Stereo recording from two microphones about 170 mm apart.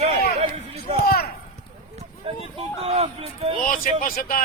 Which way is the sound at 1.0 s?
65° left (ahead or behind).